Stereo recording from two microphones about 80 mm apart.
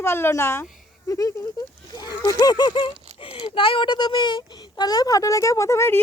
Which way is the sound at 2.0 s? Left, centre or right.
Left.